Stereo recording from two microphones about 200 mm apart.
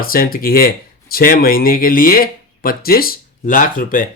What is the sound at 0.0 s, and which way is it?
Speech, 45° left (ahead or behind).